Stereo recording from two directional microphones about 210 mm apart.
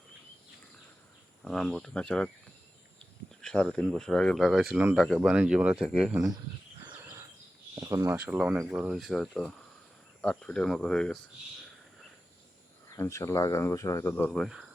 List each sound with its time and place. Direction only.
1.4 s speech: centre (ahead or behind)
3.4 s speech: 5° left (ahead or behind)
6.8 s a sound: 10° right (ahead or behind)
7.8 s speech: 15° right (ahead or behind); by 11.2 s 5° left (ahead or behind)
13.0 s speech: 15° left (ahead or behind)